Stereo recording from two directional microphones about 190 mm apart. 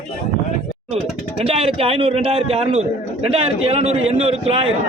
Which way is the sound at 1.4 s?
30° right (ahead or behind).